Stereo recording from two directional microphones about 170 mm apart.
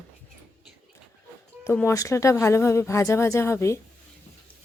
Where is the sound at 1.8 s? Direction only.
20° left (ahead or behind).